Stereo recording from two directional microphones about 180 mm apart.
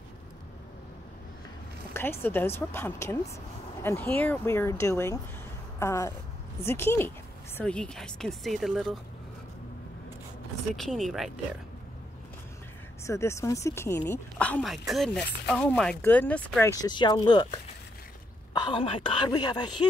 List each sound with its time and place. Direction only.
2.2 s speech: 10° left (ahead or behind)
10.8 s speech: centre (ahead or behind)
13.0 s speech: 15° left (ahead or behind)
16.8 s a woman's voice: 25° left (ahead or behind)